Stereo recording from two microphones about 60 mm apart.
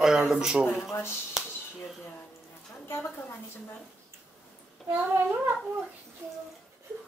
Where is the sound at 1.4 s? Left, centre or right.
Centre.